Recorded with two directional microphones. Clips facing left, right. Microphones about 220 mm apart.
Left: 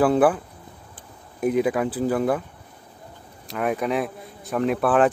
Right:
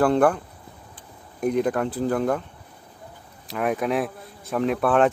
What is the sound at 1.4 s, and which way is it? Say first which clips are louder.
Speech: left 1 dB; 5° left (ahead or behind).